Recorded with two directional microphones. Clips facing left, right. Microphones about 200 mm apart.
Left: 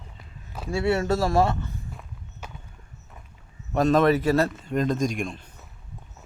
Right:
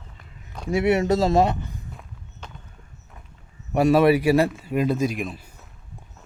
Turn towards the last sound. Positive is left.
turn(degrees=-5)  # may be behind; listen again after turning